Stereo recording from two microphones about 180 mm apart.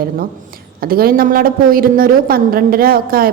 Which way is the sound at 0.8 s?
55° right (ahead or behind).